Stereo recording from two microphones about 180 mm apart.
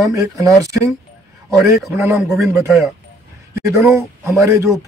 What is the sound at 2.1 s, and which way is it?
Speech, centre (ahead or behind).